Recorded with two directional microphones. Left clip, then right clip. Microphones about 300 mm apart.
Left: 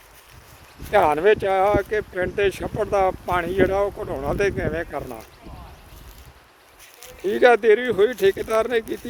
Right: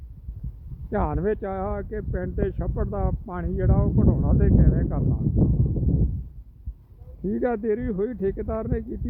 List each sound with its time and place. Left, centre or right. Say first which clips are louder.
0.9 s speech: left 10 dB; centre
7.3 s speech: left 10 dB; centre